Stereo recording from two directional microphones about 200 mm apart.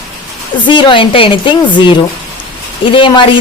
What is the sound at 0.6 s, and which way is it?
A woman's voice, 25° left (ahead or behind).